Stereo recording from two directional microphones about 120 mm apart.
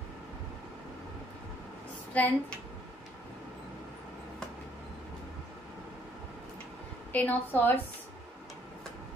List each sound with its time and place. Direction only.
2.1 s a woman's voice: 15° left (ahead or behind)
7.1 s a woman's voice: 15° left (ahead or behind)